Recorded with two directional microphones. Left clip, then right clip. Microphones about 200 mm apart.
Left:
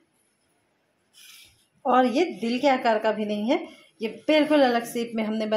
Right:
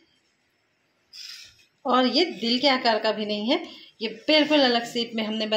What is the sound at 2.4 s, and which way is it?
A woman's voice, 5° right (ahead or behind).